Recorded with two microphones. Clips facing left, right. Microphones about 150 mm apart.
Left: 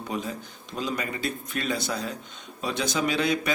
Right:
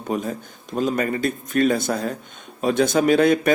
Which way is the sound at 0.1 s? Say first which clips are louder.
Right 8 dB; 50° right (ahead or behind).